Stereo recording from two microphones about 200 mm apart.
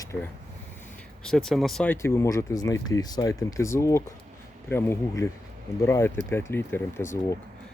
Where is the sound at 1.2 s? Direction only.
Centre (ahead or behind).